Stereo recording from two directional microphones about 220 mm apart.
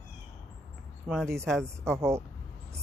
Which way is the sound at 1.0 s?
5° right (ahead or behind).